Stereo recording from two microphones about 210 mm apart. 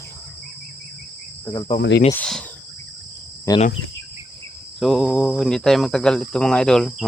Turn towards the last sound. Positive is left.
turn(degrees=0)  # may be behind; listen again after turning